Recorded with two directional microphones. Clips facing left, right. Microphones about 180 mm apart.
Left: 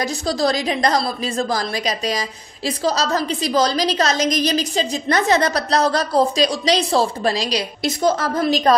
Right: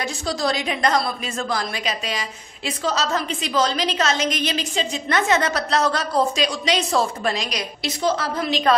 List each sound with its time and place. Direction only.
0.0 s a woman's voice: 35° left (ahead or behind)
7.8 s a woman's voice: 45° left (ahead or behind)